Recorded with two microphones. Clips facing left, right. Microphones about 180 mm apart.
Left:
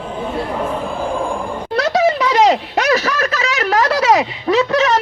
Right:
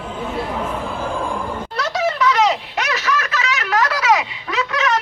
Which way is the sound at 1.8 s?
35° left (ahead or behind).